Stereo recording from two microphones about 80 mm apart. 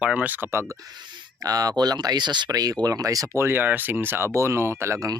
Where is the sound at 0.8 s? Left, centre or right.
Right.